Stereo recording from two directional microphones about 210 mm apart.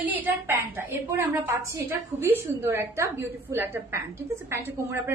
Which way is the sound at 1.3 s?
10° right (ahead or behind).